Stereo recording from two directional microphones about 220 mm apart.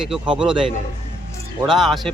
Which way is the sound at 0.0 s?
5° right (ahead or behind).